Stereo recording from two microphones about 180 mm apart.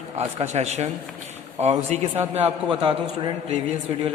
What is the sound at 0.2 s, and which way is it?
A man's voice, 35° right (ahead or behind).